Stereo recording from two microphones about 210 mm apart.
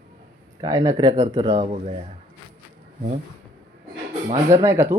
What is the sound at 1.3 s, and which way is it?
Speech, 25° right (ahead or behind).